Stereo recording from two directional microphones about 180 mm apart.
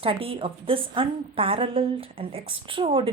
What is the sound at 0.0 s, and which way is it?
A woman's voice, 30° right (ahead or behind).